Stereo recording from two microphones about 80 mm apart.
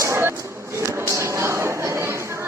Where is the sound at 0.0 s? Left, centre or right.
Right.